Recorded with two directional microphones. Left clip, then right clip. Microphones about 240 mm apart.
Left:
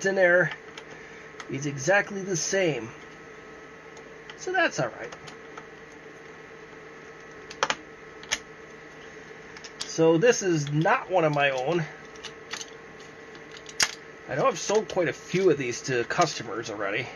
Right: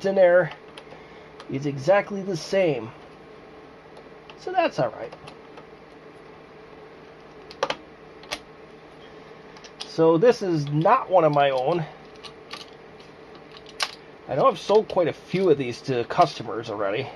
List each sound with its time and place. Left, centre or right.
0.0 s speech: right
1.6 s speech: right
4.6 s speech: right
9.9 s speech: right
14.3 s speech: right